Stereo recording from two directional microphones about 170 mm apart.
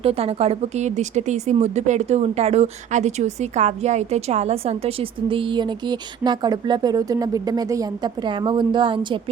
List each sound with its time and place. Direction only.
0.0 s speech: 35° right (ahead or behind)